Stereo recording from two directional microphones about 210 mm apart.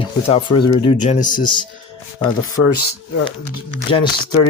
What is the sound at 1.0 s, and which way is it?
Speech, 35° left (ahead or behind).